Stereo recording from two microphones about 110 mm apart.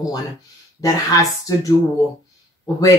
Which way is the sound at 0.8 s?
30° left (ahead or behind).